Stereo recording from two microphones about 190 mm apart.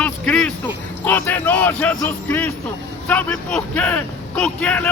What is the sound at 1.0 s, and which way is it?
A man's voice, 10° left (ahead or behind).